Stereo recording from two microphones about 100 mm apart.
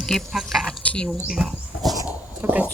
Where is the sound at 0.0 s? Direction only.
5° left (ahead or behind).